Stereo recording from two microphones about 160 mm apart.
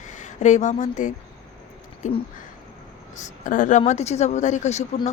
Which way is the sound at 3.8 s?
45° left (ahead or behind).